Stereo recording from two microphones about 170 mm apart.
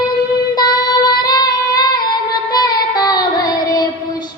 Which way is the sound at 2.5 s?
25° left (ahead or behind).